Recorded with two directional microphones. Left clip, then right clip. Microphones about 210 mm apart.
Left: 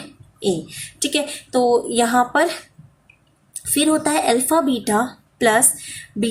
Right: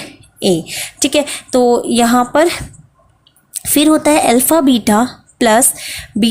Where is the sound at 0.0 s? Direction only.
40° right (ahead or behind).